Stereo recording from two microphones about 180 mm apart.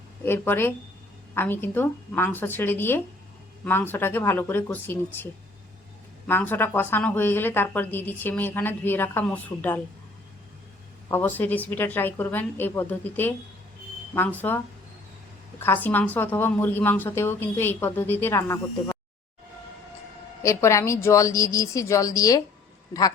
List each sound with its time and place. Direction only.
0.3 s speech: 10° left (ahead or behind)
11.1 s speech: 10° left (ahead or behind)
15.6 s speech: 10° left (ahead or behind)
20.4 s speech: 15° left (ahead or behind)